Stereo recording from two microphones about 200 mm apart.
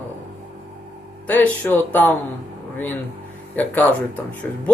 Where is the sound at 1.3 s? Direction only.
5° left (ahead or behind).